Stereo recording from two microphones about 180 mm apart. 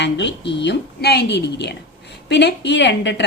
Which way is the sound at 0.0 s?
75° left (ahead or behind).